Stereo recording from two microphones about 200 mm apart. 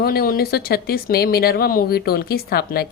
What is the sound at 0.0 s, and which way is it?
Speech, 50° left (ahead or behind).